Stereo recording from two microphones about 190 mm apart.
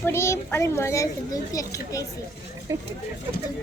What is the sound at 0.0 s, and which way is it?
A child's voice, 15° left (ahead or behind).